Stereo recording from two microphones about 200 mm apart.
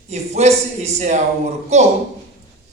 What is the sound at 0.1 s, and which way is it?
Speech, 35° right (ahead or behind).